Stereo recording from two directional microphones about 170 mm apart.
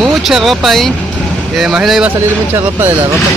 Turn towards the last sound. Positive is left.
turn(degrees=-15)  # may be behind; listen again after turning